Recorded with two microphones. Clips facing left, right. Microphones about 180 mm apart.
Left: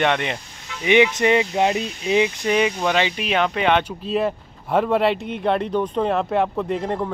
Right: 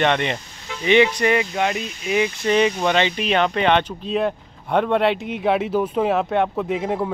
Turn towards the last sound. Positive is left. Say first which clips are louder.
# right 1 dB
turn(degrees=-5)  # may be behind; listen again after turning